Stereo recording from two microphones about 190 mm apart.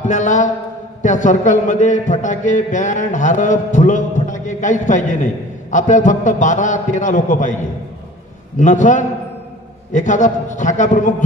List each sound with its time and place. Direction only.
0.0 s a man's voice: 40° left (ahead or behind)
8.5 s a man's voice: 40° left (ahead or behind)